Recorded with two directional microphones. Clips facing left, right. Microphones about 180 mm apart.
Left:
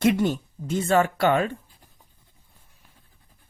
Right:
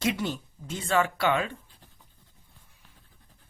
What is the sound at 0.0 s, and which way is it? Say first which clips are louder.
Speech: left 8 dB; 50° left (ahead or behind).